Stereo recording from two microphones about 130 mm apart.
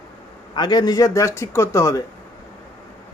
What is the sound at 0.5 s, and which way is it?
A man's voice, 30° left (ahead or behind).